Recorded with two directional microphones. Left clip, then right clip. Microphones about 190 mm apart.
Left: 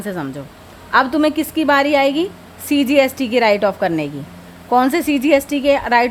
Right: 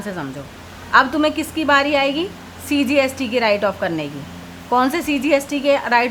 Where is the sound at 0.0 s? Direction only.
25° left (ahead or behind).